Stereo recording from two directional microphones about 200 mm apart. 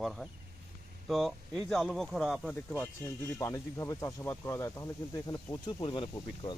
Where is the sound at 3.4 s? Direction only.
15° left (ahead or behind).